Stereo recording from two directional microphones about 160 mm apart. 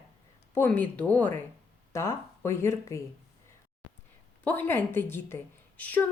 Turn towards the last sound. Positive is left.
turn(degrees=10)  # may be behind; listen again after turning